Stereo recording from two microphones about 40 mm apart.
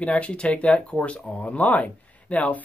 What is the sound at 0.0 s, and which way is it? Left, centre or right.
Speech, left.